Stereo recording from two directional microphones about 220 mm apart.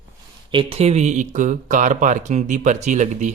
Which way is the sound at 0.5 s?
25° right (ahead or behind).